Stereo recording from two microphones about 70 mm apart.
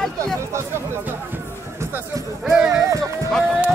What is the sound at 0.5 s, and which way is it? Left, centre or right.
Speech, right.